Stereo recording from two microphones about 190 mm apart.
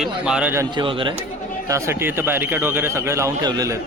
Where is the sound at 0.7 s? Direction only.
25° right (ahead or behind).